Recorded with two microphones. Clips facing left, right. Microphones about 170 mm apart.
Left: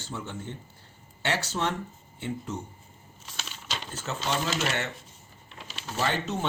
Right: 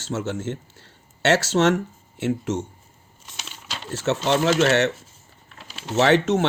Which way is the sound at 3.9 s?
75° right (ahead or behind).